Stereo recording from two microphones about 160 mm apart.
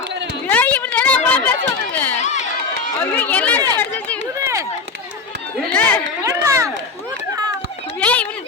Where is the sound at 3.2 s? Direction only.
10° left (ahead or behind).